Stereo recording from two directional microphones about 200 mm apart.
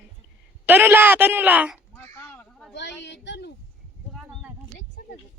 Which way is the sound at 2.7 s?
60° left (ahead or behind).